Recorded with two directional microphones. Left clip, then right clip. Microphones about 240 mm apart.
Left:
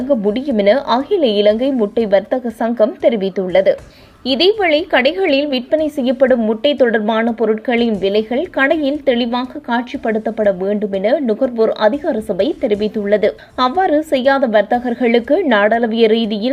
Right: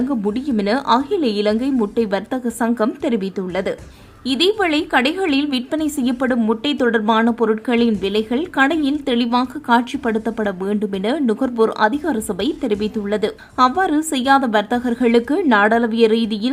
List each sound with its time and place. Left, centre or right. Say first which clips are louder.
0.0 s a woman's voice: left 6 dB; centre